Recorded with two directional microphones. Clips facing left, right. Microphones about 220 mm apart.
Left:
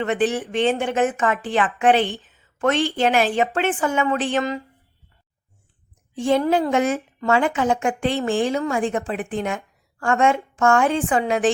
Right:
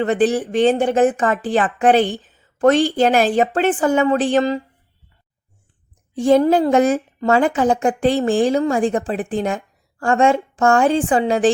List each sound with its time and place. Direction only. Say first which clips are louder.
0.0 s a woman's voice: right 5 dB; 35° right (ahead or behind)
6.1 s a woman's voice: right 5 dB; 40° right (ahead or behind)